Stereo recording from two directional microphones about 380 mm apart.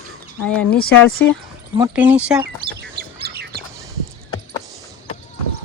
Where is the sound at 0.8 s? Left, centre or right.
Left.